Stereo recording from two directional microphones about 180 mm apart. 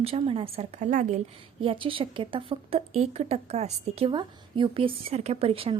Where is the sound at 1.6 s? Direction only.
30° right (ahead or behind).